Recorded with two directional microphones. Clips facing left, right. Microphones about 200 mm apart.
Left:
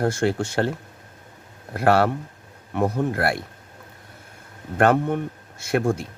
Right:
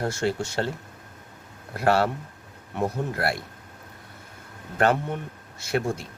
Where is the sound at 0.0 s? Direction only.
55° left (ahead or behind).